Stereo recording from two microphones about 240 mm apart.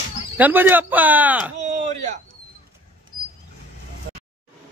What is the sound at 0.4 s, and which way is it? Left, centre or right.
Speech, centre.